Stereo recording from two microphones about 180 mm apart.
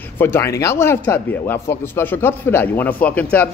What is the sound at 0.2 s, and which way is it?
Speech, 15° left (ahead or behind).